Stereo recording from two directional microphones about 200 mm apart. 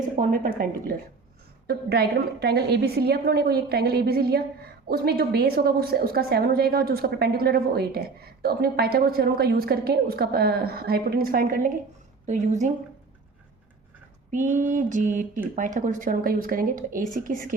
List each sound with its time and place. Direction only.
0.2 s a woman's voice: 45° right (ahead or behind)
12.2 s mantra: 35° right (ahead or behind)
14.3 s mantra: 40° right (ahead or behind)
15.5 s a woman's voice: 40° right (ahead or behind)